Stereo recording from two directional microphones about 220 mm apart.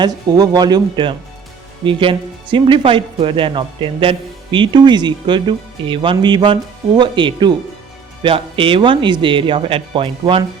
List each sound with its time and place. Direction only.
0.0 s speech: 20° right (ahead or behind)